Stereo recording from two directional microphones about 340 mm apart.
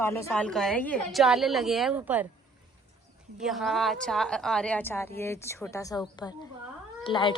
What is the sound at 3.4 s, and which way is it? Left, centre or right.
A woman's voice, centre.